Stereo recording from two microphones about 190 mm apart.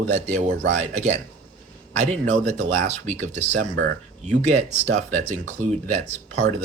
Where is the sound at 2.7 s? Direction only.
40° right (ahead or behind).